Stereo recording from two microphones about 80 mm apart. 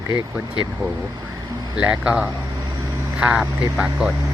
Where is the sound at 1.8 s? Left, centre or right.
Centre.